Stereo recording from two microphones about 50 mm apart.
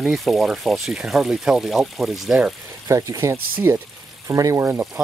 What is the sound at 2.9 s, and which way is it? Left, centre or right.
Speech, right.